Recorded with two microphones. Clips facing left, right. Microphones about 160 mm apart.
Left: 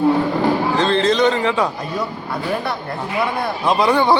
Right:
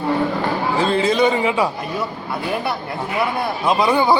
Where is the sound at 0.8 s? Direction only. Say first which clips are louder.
Right 1 dB; 10° right (ahead or behind).